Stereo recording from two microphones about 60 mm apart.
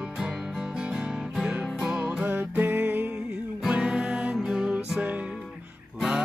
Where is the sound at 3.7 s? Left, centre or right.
Centre.